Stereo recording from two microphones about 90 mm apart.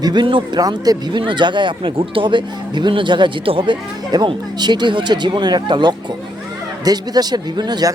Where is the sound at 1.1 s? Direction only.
60° right (ahead or behind).